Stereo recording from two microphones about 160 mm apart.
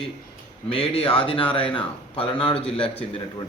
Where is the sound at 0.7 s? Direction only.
35° left (ahead or behind).